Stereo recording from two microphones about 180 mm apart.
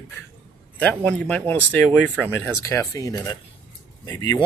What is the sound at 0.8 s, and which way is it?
Speech, 5° left (ahead or behind).